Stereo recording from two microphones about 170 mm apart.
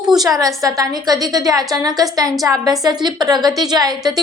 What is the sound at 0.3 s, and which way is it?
A woman's voice, 20° right (ahead or behind).